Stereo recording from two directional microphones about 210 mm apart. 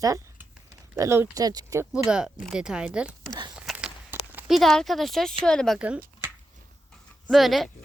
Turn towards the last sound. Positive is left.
turn(degrees=0)  # may be behind; listen again after turning